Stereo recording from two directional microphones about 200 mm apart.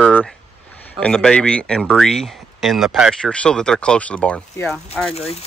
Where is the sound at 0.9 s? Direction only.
Centre (ahead or behind).